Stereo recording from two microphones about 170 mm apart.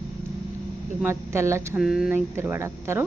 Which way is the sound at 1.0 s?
15° right (ahead or behind).